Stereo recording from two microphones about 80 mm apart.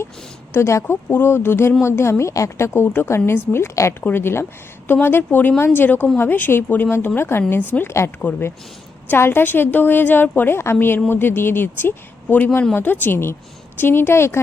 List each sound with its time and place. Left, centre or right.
0.5 s a woman's voice: left; by 8.4 s centre
9.0 s a woman's voice: left